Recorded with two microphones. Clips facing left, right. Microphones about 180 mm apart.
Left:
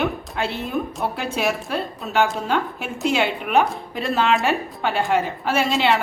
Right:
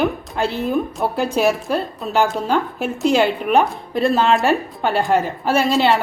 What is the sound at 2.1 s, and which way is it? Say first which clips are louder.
A woman's voice: right 3 dB; 35° right (ahead or behind).